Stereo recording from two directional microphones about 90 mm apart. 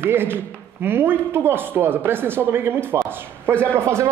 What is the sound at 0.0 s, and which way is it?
A man's voice, 25° right (ahead or behind).